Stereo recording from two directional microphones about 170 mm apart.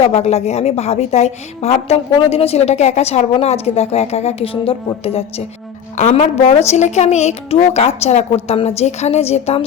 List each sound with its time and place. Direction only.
0.0 s a woman's voice: 40° left (ahead or behind)